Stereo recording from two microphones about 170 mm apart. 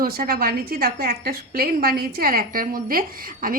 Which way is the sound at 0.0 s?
60° right (ahead or behind).